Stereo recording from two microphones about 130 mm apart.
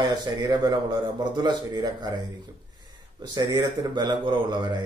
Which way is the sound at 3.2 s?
30° right (ahead or behind).